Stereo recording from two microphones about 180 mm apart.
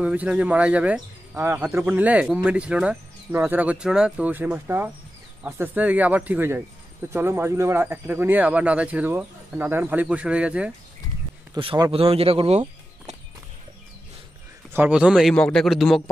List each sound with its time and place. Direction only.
0.0 s speech: 5° right (ahead or behind)
11.5 s speech: 25° right (ahead or behind)
14.7 s a man's voice: 10° right (ahead or behind)